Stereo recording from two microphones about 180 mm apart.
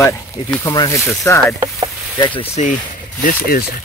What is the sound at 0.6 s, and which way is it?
Speech, 15° left (ahead or behind).